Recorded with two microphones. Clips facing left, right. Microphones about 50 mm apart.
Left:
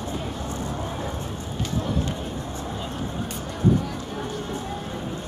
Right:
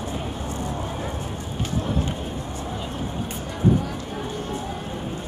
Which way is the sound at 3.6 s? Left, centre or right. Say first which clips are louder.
Right 1 dB; right.